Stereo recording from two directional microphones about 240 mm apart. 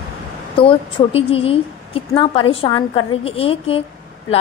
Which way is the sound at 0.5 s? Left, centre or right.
Left.